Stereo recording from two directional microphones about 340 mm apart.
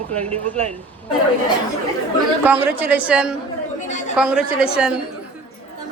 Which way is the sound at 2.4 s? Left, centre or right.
Centre.